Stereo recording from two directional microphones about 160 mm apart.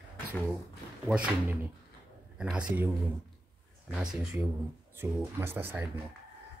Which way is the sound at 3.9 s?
5° right (ahead or behind).